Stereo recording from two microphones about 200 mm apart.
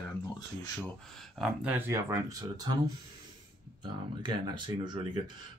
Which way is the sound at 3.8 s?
25° right (ahead or behind).